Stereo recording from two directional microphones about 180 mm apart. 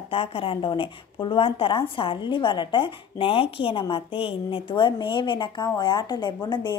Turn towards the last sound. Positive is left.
turn(degrees=25)  # may be behind; listen again after turning